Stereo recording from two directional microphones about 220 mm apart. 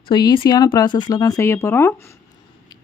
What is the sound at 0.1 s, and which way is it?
Speech, 20° left (ahead or behind).